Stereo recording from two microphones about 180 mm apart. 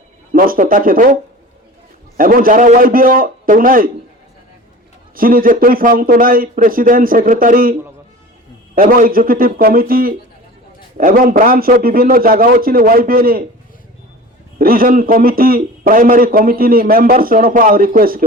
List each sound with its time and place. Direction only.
0.3 s a man's voice: 50° right (ahead or behind)
5.1 s a man's voice: 50° right (ahead or behind)
14.6 s a man's voice: 55° right (ahead or behind)